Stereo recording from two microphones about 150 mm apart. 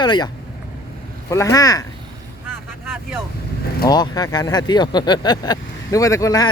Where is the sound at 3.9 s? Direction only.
25° left (ahead or behind).